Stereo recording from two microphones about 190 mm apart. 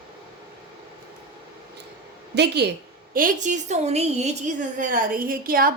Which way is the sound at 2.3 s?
60° right (ahead or behind).